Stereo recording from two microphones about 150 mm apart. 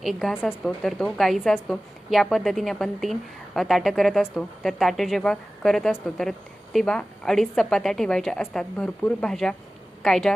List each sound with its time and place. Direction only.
0.0 s a woman's voice: centre (ahead or behind)